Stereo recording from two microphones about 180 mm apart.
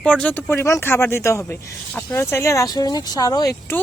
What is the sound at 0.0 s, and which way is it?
Speech, 5° left (ahead or behind).